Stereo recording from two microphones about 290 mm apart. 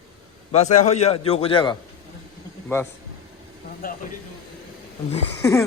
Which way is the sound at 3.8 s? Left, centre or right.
Left.